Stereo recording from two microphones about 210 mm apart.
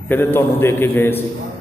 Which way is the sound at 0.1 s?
10° left (ahead or behind).